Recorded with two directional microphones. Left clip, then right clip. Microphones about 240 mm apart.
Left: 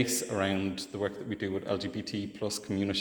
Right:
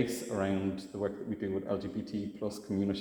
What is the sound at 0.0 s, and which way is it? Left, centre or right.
A man's voice, left.